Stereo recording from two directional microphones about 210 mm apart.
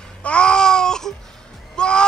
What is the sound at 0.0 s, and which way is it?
Babbling, 5° left (ahead or behind).